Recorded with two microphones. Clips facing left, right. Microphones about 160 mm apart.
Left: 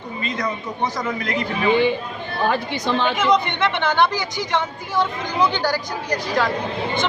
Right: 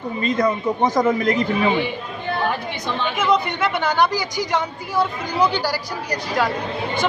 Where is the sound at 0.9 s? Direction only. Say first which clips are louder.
Right 7 dB; 45° right (ahead or behind).